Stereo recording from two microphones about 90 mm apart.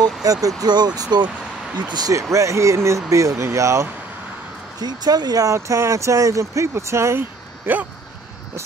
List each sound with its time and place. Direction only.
0.2 s speech: 40° right (ahead or behind)
2.3 s speech: 35° right (ahead or behind)
4.7 s speech: 50° right (ahead or behind); by 7.8 s 25° right (ahead or behind)